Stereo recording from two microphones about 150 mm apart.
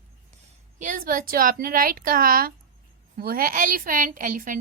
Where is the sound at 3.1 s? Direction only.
85° right; by 4.6 s 65° right (ahead or behind).